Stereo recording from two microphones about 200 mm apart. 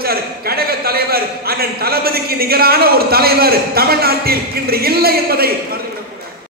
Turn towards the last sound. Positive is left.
turn(degrees=-50)  # may be behind; listen again after turning